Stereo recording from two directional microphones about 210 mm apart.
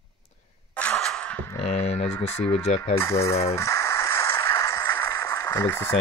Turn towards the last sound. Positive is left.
turn(degrees=10)  # may be behind; listen again after turning